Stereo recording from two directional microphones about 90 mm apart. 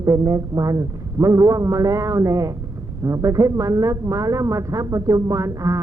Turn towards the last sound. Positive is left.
turn(degrees=-35)  # may be behind; listen again after turning